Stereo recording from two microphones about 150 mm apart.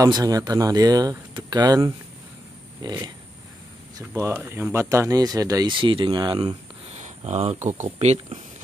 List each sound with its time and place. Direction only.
0.0 s speech: 25° right (ahead or behind)
4.0 s speech: 15° right (ahead or behind)
6.9 s a sound: 45° right (ahead or behind)
7.6 s speech: 55° right (ahead or behind)